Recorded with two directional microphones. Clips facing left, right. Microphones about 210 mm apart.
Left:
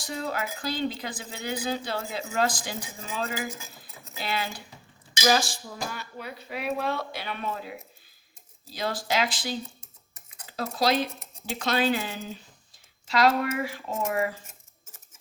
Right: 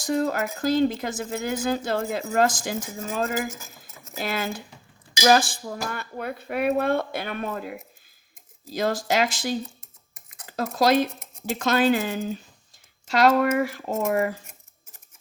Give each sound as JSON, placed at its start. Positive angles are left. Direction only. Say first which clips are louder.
{"t": 0.0, "sound": "speech", "louder": "right 8 dB", "side_deg": -45}
{"t": 10.4, "sound": "cutlery", "louder": "right 4 dB", "side_deg": -50}
{"t": 11.6, "sound": "speech", "louder": "right 5 dB", "side_deg": -45}